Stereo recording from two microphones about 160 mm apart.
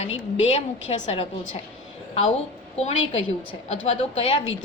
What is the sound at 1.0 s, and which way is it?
Speech, 40° left (ahead or behind).